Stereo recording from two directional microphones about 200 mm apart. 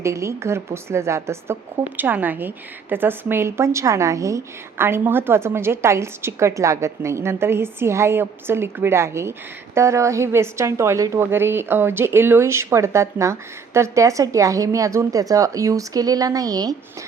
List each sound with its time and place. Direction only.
0.0 s a woman's voice: 15° right (ahead or behind)